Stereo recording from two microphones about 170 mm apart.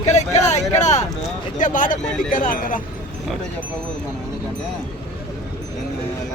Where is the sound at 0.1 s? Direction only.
40° left (ahead or behind).